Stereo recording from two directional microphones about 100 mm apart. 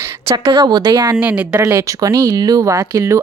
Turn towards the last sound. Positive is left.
turn(degrees=-30)  # may be behind; listen again after turning